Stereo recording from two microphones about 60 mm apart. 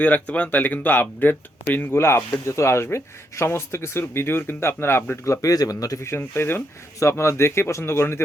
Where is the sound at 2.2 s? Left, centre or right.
Left.